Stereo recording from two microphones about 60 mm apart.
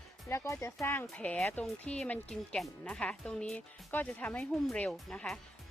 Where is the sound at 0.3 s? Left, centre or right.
Left.